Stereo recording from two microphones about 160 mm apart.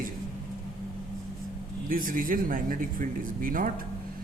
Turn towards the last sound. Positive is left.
turn(degrees=-55)  # may be behind; listen again after turning